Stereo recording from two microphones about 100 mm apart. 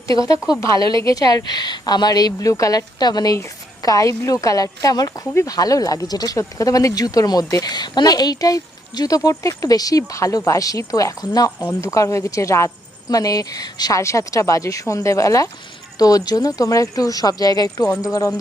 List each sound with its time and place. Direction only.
0.1 s speech: 40° left (ahead or behind)